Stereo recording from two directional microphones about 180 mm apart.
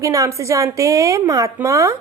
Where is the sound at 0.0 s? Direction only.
20° right (ahead or behind).